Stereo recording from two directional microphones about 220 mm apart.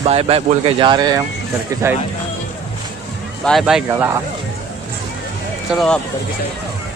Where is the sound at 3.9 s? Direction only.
15° right (ahead or behind).